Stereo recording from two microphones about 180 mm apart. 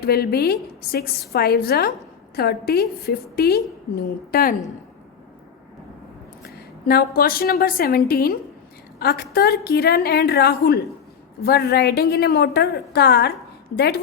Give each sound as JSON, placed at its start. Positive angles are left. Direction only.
{"t": 0.0, "sound": "a woman's voice", "side_deg": 60}
{"t": 6.4, "sound": "a woman's voice", "side_deg": 60}